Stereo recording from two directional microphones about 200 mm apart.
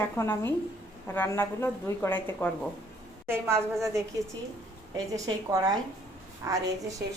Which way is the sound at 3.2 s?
10° right (ahead or behind).